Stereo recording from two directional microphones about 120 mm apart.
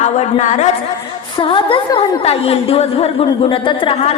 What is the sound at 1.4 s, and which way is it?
Speech, 45° left (ahead or behind).